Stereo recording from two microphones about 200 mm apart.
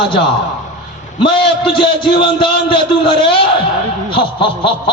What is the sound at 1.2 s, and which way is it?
A man's voice, 25° left (ahead or behind).